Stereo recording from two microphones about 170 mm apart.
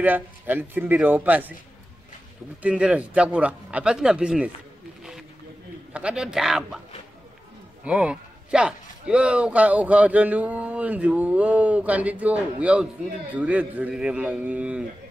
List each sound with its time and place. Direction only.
0.0 s speech: 10° right (ahead or behind)
2.6 s speech: 5° right (ahead or behind)
5.9 s a man's voice: 5° right (ahead or behind)
7.8 s speech: 5° right (ahead or behind)